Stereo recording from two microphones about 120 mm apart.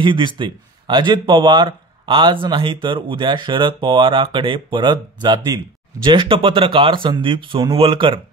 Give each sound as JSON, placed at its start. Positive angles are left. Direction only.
{"t": 0.0, "sound": "speech", "side_deg": -40}